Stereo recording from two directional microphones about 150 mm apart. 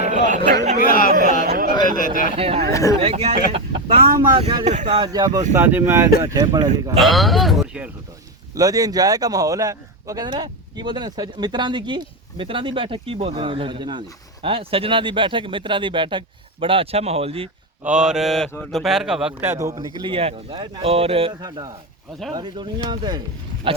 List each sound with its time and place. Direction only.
0.1 s speech: 60° right (ahead or behind)
0.8 s a sound: 70° left (ahead or behind)
1.5 s a sound: 85° right
2.0 s speech: 65° left (ahead or behind)
2.3 s speech: 40° right (ahead or behind)
2.6 s speech: 20° left (ahead or behind)
3.0 s speech: 40° right (ahead or behind)
4.9 s speech: 25° right (ahead or behind)
5.5 s speech: 15° right (ahead or behind)
7.0 s speech: centre (ahead or behind)
8.5 s speech: 25° right (ahead or behind); by 17.5 s 40° right (ahead or behind)
17.8 s speech: 5° right (ahead or behind); by 21.3 s 40° right (ahead or behind)
21.4 s speech: 30° right (ahead or behind)